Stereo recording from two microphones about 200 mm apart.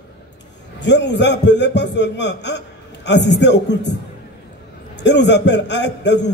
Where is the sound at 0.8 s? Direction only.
60° left (ahead or behind).